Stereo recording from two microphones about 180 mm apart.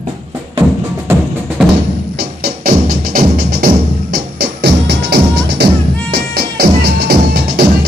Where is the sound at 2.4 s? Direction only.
55° right (ahead or behind).